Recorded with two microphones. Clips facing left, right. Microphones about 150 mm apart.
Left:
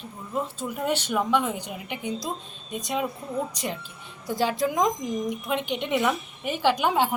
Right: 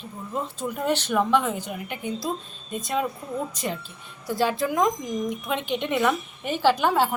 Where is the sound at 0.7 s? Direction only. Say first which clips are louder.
Right 2 dB; 10° left (ahead or behind).